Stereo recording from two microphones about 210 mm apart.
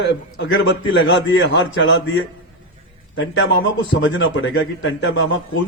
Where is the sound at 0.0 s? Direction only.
65° left (ahead or behind).